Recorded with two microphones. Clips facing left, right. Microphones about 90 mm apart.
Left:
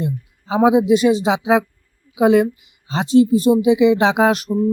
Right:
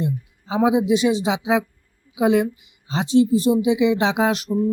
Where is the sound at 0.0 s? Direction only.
60° left (ahead or behind).